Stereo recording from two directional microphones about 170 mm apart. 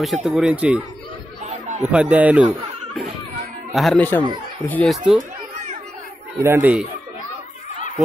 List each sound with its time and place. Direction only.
0.0 s speech: centre (ahead or behind)
1.4 s a sound: 40° right (ahead or behind)
1.9 s speech: 10° right (ahead or behind); by 4.9 s 10° left (ahead or behind)
6.3 s speech: 15° right (ahead or behind)